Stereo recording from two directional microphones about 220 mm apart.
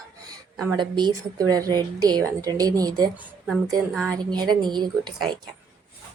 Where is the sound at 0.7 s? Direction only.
20° right (ahead or behind).